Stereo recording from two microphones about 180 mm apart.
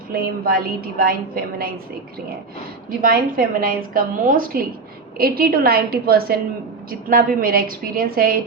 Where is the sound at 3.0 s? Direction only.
55° right (ahead or behind).